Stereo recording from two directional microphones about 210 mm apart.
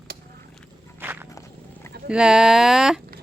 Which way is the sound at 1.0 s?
10° right (ahead or behind).